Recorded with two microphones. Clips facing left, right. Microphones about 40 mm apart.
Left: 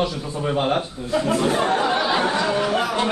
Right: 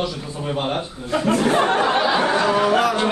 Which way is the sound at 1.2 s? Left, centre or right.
Right.